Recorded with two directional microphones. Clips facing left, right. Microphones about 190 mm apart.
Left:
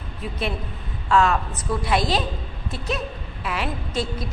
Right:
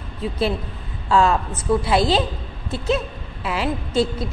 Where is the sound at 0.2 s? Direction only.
25° right (ahead or behind).